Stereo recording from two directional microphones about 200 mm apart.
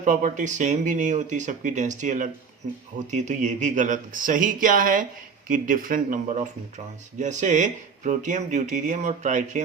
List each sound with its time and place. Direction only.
0.0 s speech: 40° right (ahead or behind)